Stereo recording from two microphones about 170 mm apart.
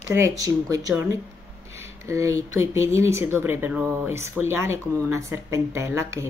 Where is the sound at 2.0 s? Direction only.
15° right (ahead or behind).